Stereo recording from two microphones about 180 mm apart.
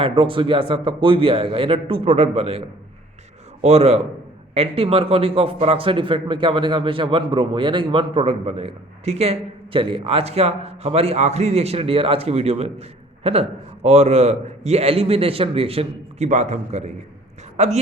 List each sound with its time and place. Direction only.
0.0 s a man's voice: 30° right (ahead or behind)